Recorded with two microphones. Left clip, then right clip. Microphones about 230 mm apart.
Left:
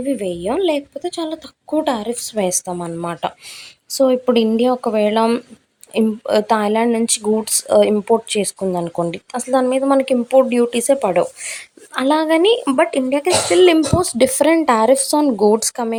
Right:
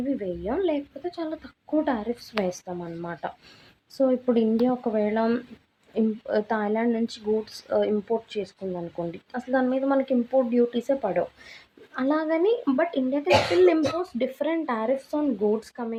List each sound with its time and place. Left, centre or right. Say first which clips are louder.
0.1 s speech: left 10 dB; left